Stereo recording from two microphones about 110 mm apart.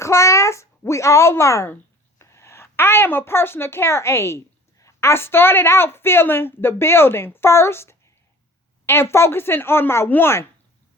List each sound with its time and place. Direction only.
0.0 s a child's voice: 25° left (ahead or behind)